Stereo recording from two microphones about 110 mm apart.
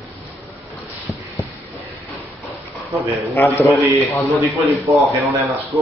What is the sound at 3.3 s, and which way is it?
Speech, 20° left (ahead or behind).